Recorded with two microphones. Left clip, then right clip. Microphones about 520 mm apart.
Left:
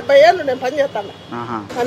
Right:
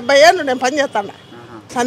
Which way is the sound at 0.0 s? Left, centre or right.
Right.